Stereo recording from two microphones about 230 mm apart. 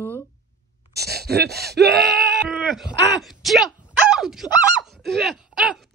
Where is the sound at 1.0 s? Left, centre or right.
Right.